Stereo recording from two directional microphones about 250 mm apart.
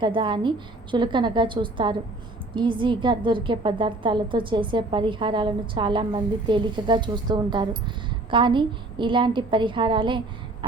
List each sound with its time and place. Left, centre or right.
0.0 s a woman's voice: centre